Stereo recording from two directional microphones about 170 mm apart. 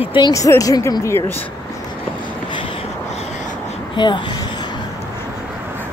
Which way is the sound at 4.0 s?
25° left (ahead or behind).